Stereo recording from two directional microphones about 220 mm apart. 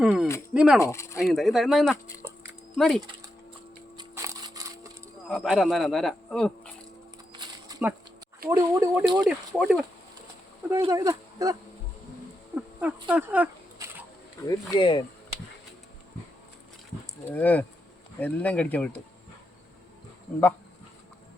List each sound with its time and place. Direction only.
0.0 s speech: 5° right (ahead or behind)
0.8 s speech: 10° left (ahead or behind)
1.2 s speech: centre (ahead or behind)
2.2 s dog: 10° right (ahead or behind)
2.7 s speech: centre (ahead or behind)
3.9 s crushing: 15° right (ahead or behind)
5.3 s speech: centre (ahead or behind)
7.7 s a sound: 15° right (ahead or behind)
8.4 s speech: 15° right (ahead or behind)
9.6 s speech: centre (ahead or behind)
10.8 s speech: 15° right (ahead or behind)
12.5 s a sound: 5° right (ahead or behind)
14.4 s speech: 15° left (ahead or behind)
17.2 s speech: 10° left (ahead or behind)